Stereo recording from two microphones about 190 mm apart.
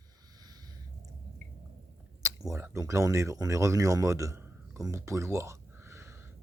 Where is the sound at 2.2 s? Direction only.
15° right (ahead or behind).